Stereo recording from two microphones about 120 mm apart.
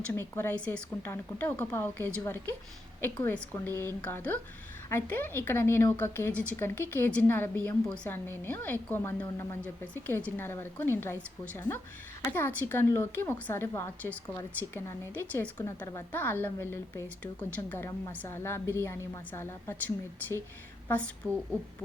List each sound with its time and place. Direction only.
0.1 s a woman's voice: 20° left (ahead or behind)
9.6 s a woman's voice: 10° left (ahead or behind)